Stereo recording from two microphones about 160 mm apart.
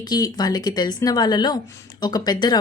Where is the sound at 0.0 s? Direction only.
25° left (ahead or behind).